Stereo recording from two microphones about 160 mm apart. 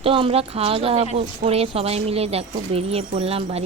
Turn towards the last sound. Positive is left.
turn(degrees=-40)  # may be behind; listen again after turning